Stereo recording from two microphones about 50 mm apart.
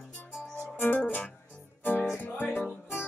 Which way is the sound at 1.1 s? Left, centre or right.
Left.